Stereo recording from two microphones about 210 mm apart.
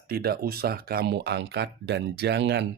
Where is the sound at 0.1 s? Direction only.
50° right (ahead or behind).